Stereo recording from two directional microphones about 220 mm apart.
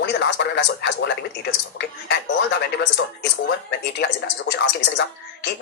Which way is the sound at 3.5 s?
50° left (ahead or behind).